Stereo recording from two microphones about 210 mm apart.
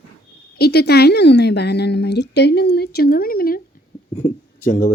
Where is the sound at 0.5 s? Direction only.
50° left (ahead or behind).